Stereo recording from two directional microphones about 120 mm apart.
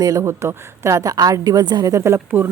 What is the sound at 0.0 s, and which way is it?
A woman's voice, 30° right (ahead or behind).